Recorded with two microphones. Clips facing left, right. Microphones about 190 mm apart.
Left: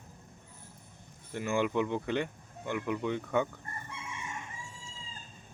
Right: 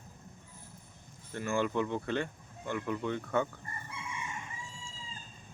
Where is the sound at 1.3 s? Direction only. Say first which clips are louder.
Left 2 dB; 15° left (ahead or behind).